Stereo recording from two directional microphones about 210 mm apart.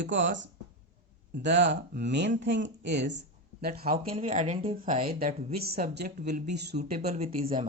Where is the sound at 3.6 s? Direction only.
45° right (ahead or behind).